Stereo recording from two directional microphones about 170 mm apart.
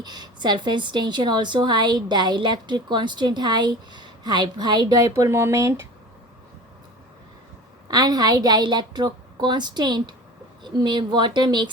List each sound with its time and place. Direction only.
0.0 s a woman's voice: 25° right (ahead or behind)
7.9 s a woman's voice: 25° right (ahead or behind)